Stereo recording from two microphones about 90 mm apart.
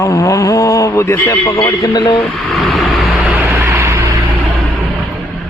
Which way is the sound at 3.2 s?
20° right (ahead or behind).